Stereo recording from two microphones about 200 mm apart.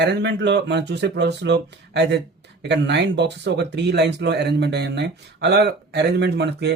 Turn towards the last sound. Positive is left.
turn(degrees=-55)  # may be behind; listen again after turning